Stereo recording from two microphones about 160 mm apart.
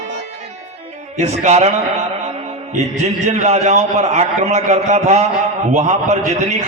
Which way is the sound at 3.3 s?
45° right (ahead or behind).